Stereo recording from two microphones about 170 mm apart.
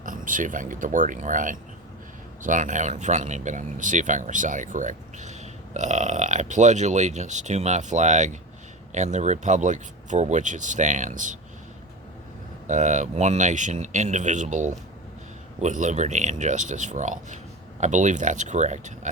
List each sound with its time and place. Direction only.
0.0 s speech: 50° right (ahead or behind)
12.6 s speech: 45° right (ahead or behind)